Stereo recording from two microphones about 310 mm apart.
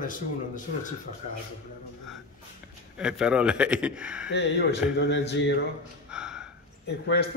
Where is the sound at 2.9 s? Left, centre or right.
Centre.